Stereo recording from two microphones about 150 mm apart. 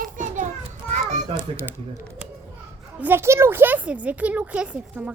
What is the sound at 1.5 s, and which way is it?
Speech, 10° right (ahead or behind).